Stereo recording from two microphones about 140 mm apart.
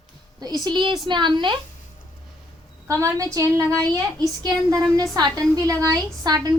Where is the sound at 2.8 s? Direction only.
20° right (ahead or behind).